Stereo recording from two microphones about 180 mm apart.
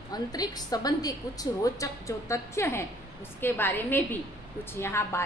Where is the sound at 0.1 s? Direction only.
20° left (ahead or behind).